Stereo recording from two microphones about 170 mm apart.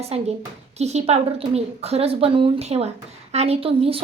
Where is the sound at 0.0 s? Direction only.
35° right (ahead or behind).